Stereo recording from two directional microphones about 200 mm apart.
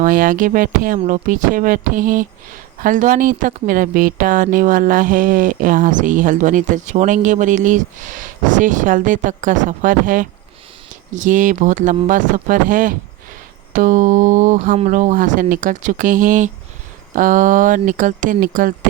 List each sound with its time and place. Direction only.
0.0 s speech: 40° right (ahead or behind)